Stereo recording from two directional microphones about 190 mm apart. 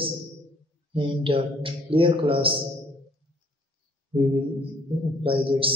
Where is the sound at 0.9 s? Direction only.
30° right (ahead or behind).